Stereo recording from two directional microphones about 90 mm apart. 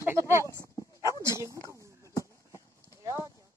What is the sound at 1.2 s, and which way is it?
Speech, 35° right (ahead or behind).